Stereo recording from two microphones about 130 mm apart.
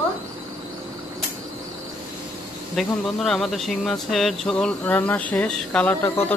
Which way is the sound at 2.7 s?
Centre (ahead or behind).